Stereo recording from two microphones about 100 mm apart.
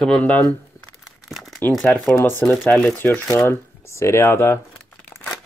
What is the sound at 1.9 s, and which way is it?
Speech, 5° left (ahead or behind).